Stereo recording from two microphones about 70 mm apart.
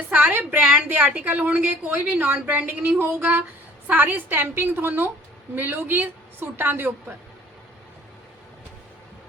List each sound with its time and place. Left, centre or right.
0.1 s a woman's voice: right